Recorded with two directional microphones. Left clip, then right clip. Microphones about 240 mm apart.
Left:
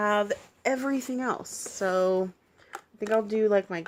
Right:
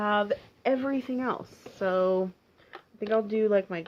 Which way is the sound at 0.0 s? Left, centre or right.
Left.